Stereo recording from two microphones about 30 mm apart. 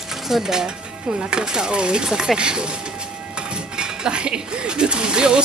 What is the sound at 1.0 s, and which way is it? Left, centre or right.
Speech, right.